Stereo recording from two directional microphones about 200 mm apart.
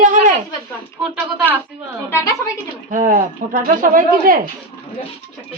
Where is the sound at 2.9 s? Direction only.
40° right (ahead or behind).